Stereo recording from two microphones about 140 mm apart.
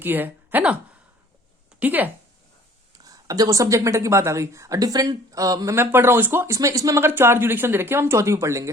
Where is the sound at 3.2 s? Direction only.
25° right (ahead or behind).